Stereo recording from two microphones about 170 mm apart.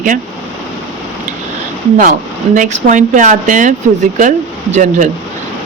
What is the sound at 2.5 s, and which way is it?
A woman's voice, 50° right (ahead or behind).